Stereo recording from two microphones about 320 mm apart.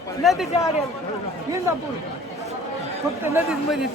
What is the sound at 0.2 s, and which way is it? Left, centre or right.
Speech, centre.